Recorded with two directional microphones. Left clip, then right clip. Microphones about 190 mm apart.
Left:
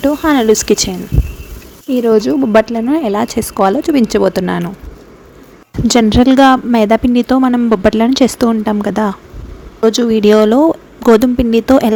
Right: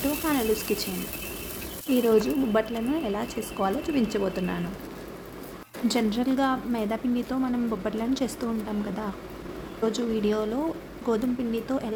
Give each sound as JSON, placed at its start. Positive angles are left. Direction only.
{"t": 0.3, "sound": "speech", "side_deg": 40}
{"t": 1.9, "sound": "speech", "side_deg": 40}
{"t": 5.9, "sound": "speech", "side_deg": 45}